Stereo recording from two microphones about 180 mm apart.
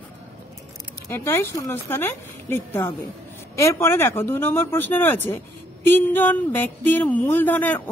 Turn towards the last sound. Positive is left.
turn(degrees=10)  # may be behind; listen again after turning